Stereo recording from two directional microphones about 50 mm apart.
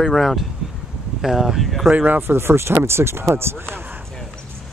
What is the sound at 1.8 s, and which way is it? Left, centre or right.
Speech, right.